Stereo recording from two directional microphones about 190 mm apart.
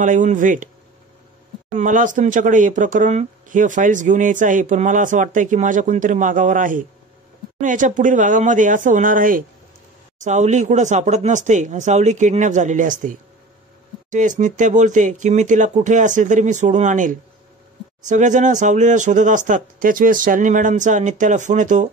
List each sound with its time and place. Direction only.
0.0 s speech: 40° right (ahead or behind)
1.7 s speech: 40° right (ahead or behind)